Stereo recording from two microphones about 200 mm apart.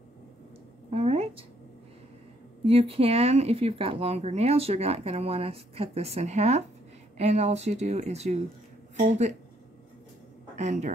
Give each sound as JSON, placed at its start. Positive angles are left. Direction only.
{"t": 0.8, "sound": "a sound", "side_deg": -30}
{"t": 2.6, "sound": "speech", "side_deg": -30}
{"t": 10.6, "sound": "speech", "side_deg": -35}